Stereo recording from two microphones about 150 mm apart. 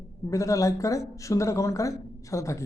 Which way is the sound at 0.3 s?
20° left (ahead or behind).